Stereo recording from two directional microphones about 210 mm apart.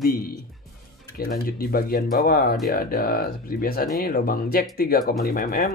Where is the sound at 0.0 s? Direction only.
45° left (ahead or behind).